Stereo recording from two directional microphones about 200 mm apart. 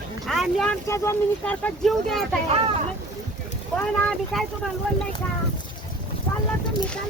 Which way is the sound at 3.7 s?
5° left (ahead or behind).